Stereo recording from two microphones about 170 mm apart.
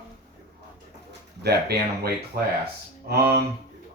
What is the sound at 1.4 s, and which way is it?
Speech, 70° right (ahead or behind).